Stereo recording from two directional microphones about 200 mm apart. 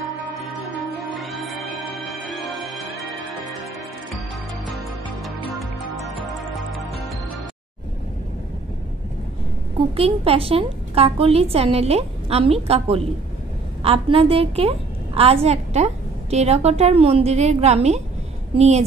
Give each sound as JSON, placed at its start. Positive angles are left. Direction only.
{"t": 1.2, "sound": "music", "side_deg": 0}
{"t": 9.9, "sound": "a woman's voice", "side_deg": -30}